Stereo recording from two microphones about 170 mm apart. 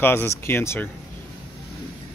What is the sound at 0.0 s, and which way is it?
Speech, 15° left (ahead or behind).